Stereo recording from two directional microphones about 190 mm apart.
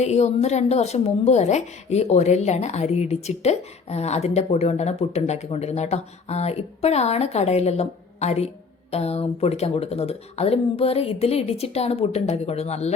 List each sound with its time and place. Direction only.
0.0 s a woman's voice: 35° left (ahead or behind)